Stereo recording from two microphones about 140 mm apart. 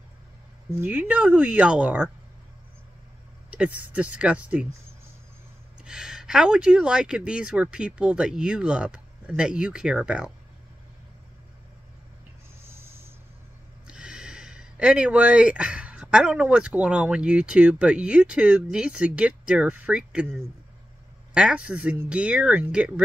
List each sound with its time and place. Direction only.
0.7 s speech: 15° right (ahead or behind)
3.4 s speech: 10° right (ahead or behind)
5.9 s speech: 5° right (ahead or behind)
12.6 s a sound: 20° right (ahead or behind)
13.8 s speech: 5° right (ahead or behind)
21.3 s speech: 5° right (ahead or behind)